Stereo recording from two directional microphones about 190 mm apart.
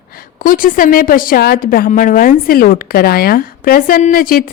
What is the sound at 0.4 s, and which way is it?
A woman's voice, 45° left (ahead or behind).